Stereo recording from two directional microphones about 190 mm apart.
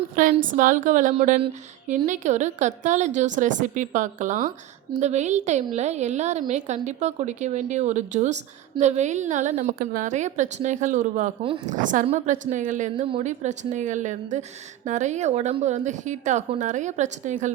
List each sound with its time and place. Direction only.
0.5 s a woman's voice: 45° right (ahead or behind)
11.4 s a woman's voice: 30° right (ahead or behind)
11.7 s a woman's voice: 40° right (ahead or behind)